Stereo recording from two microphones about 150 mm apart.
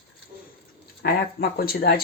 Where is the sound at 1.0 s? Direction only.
90° left.